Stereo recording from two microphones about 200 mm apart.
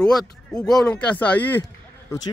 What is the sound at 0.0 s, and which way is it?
Speech, 5° left (ahead or behind).